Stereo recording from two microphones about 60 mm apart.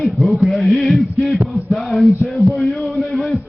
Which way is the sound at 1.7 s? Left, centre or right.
Centre.